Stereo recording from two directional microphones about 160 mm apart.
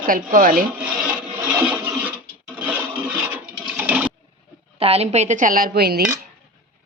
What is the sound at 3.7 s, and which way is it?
Sewing machine, 10° right (ahead or behind).